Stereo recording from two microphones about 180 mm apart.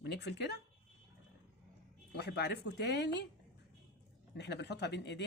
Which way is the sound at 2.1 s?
65° left (ahead or behind).